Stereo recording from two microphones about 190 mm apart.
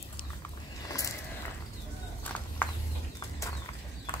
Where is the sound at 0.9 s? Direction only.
15° left (ahead or behind).